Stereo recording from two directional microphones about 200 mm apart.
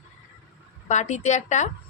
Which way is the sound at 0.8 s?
35° left (ahead or behind).